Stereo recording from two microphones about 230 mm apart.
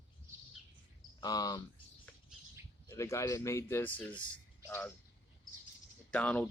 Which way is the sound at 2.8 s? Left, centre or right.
Centre.